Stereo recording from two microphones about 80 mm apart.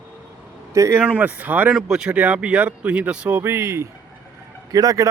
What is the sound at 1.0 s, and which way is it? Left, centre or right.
Speech, right.